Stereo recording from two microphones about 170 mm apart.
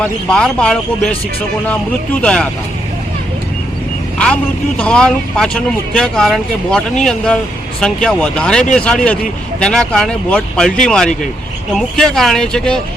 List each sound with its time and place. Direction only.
0.0 s speech: 5° left (ahead or behind)
2.2 s speech: 5° left (ahead or behind)
4.8 s speech: 5° left (ahead or behind)